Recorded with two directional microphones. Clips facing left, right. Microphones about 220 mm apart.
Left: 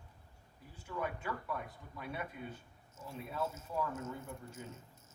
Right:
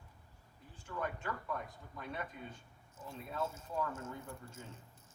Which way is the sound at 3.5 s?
30° right (ahead or behind).